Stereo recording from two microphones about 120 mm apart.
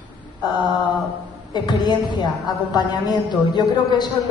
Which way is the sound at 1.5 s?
35° left (ahead or behind).